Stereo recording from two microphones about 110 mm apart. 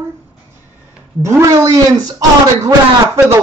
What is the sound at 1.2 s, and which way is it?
A man's voice, 30° right (ahead or behind).